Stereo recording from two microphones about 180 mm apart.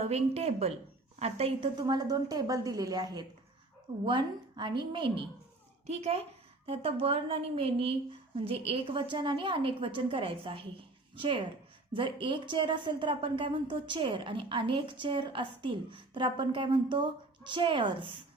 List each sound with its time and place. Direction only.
0.0 s a woman's voice: 35° right (ahead or behind)
1.7 s a woman's voice: 20° right (ahead or behind)